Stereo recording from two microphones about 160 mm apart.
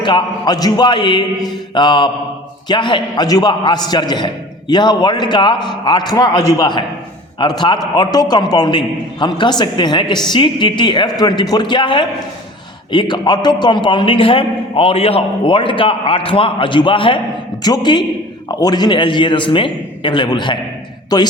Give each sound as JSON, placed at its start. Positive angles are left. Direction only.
{"t": 0.0, "sound": "a woman's voice", "side_deg": 30}